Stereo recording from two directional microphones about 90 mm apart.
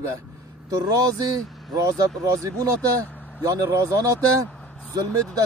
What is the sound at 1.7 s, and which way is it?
Speech, 45° right (ahead or behind).